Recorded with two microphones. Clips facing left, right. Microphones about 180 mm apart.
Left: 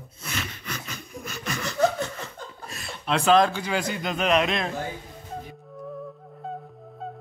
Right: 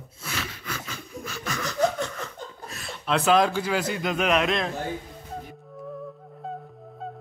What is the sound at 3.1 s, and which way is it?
A man's voice, 5° right (ahead or behind).